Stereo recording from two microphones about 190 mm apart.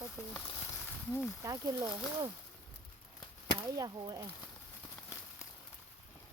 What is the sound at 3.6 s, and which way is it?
Speech, 20° right (ahead or behind).